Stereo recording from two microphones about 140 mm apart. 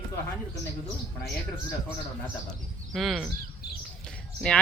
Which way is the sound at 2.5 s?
Centre (ahead or behind).